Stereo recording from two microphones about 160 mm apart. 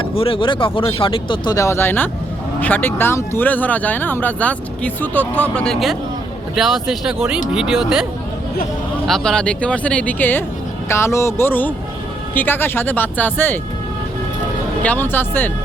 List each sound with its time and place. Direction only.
0.2 s speech: 35° left (ahead or behind); by 8.0 s 5° right (ahead or behind)
9.0 s speech: 5° left (ahead or behind)
14.8 s speech: 15° left (ahead or behind)